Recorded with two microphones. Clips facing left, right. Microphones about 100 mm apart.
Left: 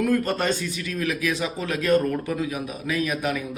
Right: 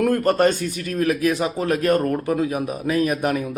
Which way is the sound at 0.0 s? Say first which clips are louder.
Right 5 dB; 50° right (ahead or behind).